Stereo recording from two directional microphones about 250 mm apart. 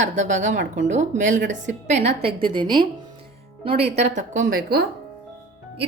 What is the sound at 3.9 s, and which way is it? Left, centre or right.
Speech, right.